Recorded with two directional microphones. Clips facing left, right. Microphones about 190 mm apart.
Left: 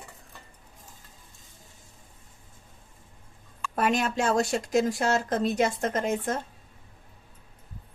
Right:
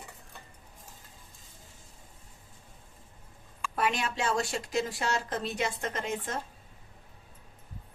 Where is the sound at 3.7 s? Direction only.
45° left (ahead or behind).